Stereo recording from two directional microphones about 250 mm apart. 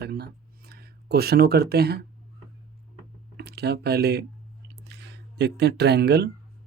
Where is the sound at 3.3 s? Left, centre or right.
Right.